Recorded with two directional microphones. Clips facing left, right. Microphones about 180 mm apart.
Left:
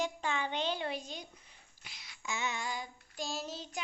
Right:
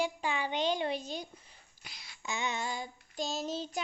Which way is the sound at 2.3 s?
20° right (ahead or behind).